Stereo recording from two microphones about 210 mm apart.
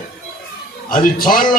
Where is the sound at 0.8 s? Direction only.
40° left (ahead or behind).